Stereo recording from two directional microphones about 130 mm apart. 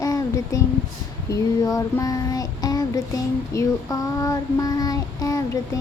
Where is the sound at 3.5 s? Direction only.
25° left (ahead or behind).